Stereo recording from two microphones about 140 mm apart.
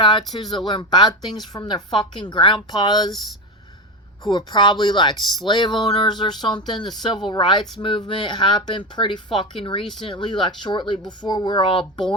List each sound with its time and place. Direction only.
0.0 s a sound: 35° left (ahead or behind)
0.5 s speech: 35° left (ahead or behind)
4.3 s speech: 35° left (ahead or behind)